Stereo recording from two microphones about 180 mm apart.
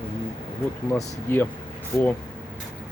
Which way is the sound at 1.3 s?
15° left (ahead or behind).